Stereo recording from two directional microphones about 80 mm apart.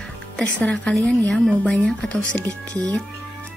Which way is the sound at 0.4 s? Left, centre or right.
Centre.